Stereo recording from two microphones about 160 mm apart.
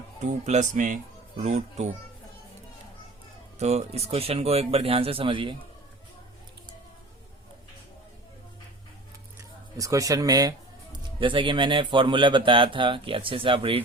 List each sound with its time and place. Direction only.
0.2 s speech: 45° right (ahead or behind)
3.6 s speech: 40° right (ahead or behind)
9.7 s speech: 20° right (ahead or behind)